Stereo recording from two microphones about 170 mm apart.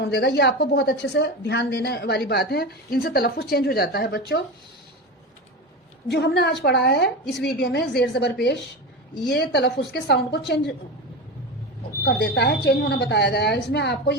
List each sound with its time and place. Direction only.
0.0 s a woman's voice: 80° left
6.1 s a woman's voice: 75° left (ahead or behind)
12.0 s a woman's voice: 85° left